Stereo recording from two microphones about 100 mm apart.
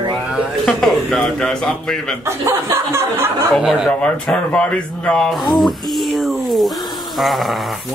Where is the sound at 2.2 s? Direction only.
25° right (ahead or behind).